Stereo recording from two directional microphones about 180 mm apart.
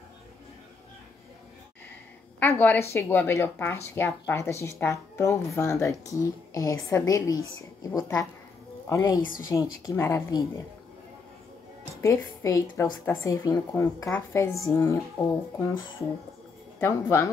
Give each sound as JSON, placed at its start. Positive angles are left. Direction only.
{"t": 2.4, "sound": "a woman's voice", "side_deg": 10}
{"t": 12.0, "sound": "a woman's voice", "side_deg": 20}
{"t": 16.8, "sound": "a woman's voice", "side_deg": 15}